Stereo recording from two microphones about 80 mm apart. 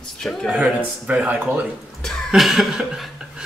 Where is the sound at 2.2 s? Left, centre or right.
Centre.